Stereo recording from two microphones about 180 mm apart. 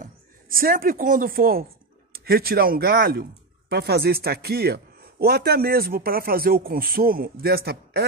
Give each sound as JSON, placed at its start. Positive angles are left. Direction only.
{"t": 0.0, "sound": "speech", "side_deg": -50}